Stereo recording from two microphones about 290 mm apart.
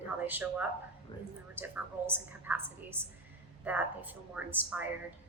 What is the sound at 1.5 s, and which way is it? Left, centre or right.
A woman's voice, centre.